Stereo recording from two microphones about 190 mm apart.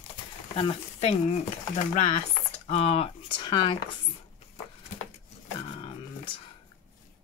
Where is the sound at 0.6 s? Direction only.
30° left (ahead or behind).